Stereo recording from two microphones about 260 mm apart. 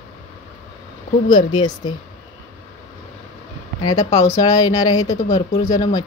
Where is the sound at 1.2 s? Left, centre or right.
Centre.